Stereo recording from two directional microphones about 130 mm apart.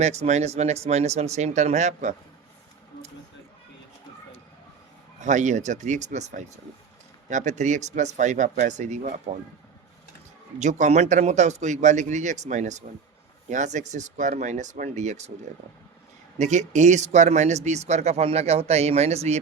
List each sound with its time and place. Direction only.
0.0 s speech: 60° right (ahead or behind)
5.2 s speech: 65° right (ahead or behind)
10.6 s speech: 65° right (ahead or behind)
16.4 s speech: 65° right (ahead or behind)